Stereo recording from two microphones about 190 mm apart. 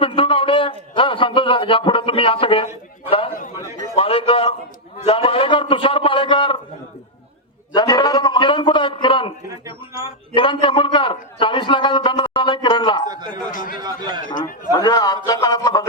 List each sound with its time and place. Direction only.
0.0 s a man's voice: 25° left (ahead or behind)
3.1 s a sound: 30° left (ahead or behind)
3.9 s a man's voice: 30° left (ahead or behind)
7.7 s a man's voice: 20° left (ahead or behind)
10.3 s a man's voice: 25° left (ahead or behind)
13.1 s a man's voice: 20° right (ahead or behind)
13.5 s speech: 45° left (ahead or behind)
13.7 s a man's voice: 20° right (ahead or behind)
14.7 s a man's voice: 20° left (ahead or behind)